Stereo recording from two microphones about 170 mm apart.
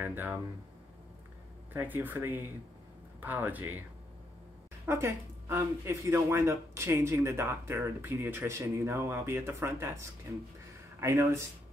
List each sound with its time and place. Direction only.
0.0 s speech: 10° right (ahead or behind)
1.7 s speech: 10° right (ahead or behind)
4.8 s speech: 15° right (ahead or behind)